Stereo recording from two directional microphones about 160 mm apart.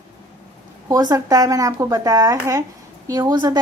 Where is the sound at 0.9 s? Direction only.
25° right (ahead or behind).